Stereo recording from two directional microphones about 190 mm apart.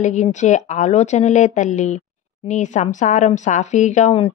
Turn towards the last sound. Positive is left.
turn(degrees=35)  # may be behind; listen again after turning